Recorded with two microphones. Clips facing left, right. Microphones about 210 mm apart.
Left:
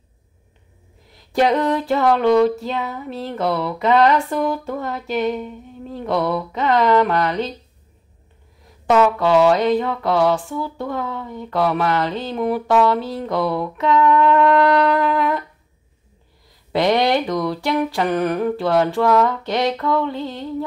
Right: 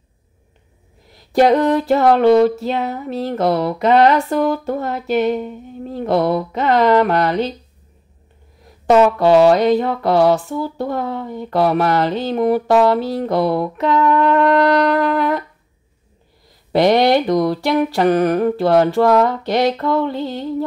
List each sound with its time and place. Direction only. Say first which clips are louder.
1.3 s mantra: right 4 dB; 40° right (ahead or behind)
8.8 s mantra: right 4 dB; 40° right (ahead or behind)
16.7 s mantra: right 4 dB; 35° right (ahead or behind)